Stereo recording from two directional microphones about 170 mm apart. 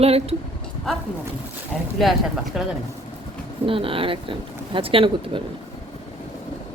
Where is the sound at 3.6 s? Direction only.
30° right (ahead or behind).